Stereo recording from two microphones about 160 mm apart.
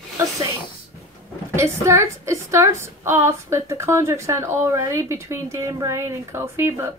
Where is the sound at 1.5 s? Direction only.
15° right (ahead or behind).